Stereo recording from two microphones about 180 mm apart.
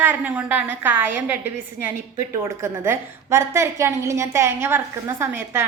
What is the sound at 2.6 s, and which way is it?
A woman's voice, 15° right (ahead or behind).